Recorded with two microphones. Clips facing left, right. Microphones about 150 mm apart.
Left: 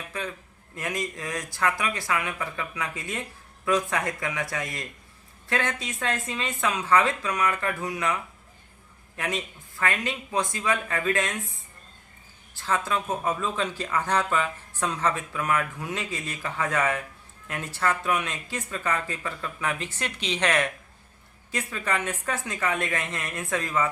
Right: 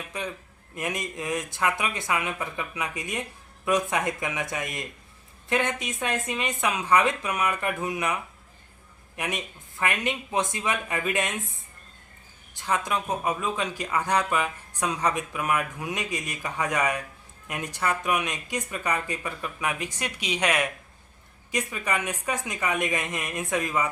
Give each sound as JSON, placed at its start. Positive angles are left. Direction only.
{"t": 0.1, "sound": "a man's voice", "side_deg": -20}
{"t": 12.5, "sound": "speech", "side_deg": -15}